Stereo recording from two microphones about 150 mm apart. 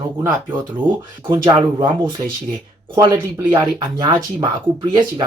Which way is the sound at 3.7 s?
30° right (ahead or behind).